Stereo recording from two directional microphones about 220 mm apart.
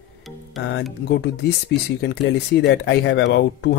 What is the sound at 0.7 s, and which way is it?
Speech, 50° left (ahead or behind).